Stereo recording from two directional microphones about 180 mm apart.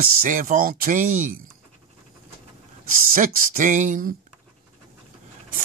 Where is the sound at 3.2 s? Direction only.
45° right (ahead or behind).